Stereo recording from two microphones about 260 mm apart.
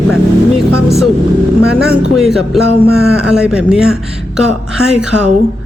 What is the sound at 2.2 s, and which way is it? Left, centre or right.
A woman's voice, centre.